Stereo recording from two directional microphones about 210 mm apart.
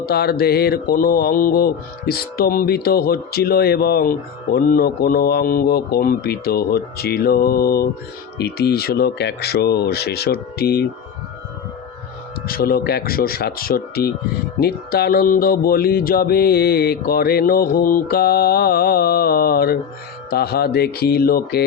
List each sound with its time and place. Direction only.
0.0 s mantra: 45° left (ahead or behind)
12.5 s mantra: 45° left (ahead or behind)